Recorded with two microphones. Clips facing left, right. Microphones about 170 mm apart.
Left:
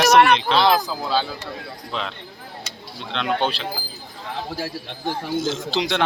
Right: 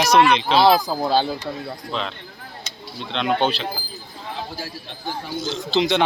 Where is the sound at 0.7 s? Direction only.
40° right (ahead or behind).